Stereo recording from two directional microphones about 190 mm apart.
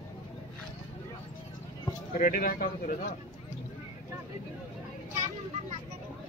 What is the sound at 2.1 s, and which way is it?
Speech, 50° left (ahead or behind).